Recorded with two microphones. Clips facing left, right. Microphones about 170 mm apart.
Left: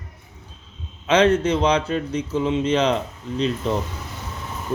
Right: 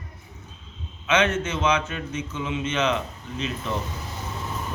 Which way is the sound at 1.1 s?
35° left (ahead or behind).